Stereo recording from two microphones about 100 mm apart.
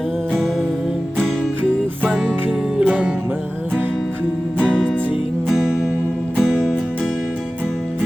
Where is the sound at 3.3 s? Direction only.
20° right (ahead or behind).